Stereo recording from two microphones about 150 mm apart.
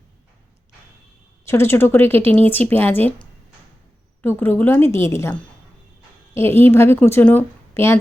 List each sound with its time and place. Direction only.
1.5 s a woman's voice: 15° left (ahead or behind)
4.2 s a woman's voice: 15° left (ahead or behind)